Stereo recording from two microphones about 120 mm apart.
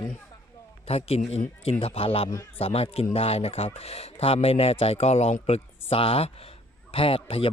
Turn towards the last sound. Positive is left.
turn(degrees=50)  # may be behind; listen again after turning